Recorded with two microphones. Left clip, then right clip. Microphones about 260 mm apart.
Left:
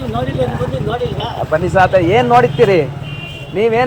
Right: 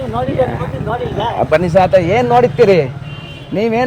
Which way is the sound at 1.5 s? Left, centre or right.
Right.